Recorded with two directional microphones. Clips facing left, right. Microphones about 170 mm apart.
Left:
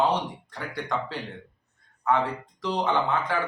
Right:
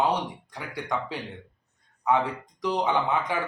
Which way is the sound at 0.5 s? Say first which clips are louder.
Left 1 dB; 15° right (ahead or behind).